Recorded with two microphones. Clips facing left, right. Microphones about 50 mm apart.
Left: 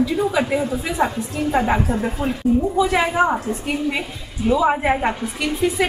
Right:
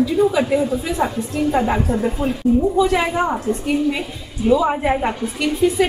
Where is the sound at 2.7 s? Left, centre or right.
Centre.